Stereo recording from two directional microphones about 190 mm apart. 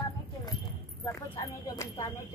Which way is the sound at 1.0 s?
20° left (ahead or behind).